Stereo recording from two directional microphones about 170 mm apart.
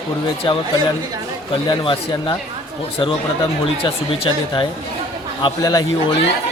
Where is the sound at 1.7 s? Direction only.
30° left (ahead or behind).